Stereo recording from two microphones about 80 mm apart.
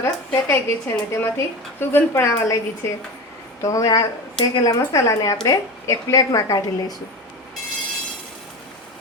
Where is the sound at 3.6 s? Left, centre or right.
Left.